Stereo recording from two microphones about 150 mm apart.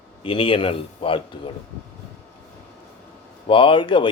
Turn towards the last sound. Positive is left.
turn(degrees=35)  # may be behind; listen again after turning